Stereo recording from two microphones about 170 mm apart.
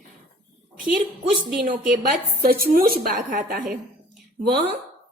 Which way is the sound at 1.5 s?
55° right (ahead or behind).